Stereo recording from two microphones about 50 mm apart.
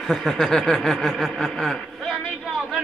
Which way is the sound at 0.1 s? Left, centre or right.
Centre.